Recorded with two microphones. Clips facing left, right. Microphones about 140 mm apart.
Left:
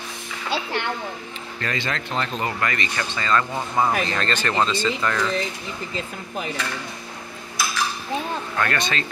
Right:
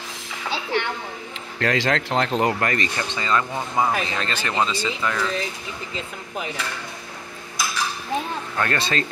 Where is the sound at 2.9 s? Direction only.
20° right (ahead or behind).